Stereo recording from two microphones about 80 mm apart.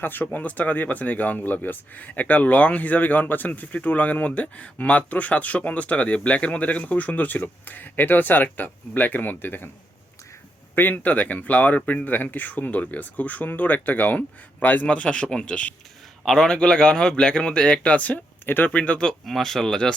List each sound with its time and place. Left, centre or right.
0.0 s speech: left
10.8 s a man's voice: left